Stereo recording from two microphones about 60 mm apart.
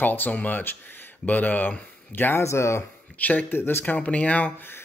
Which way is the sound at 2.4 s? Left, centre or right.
Left.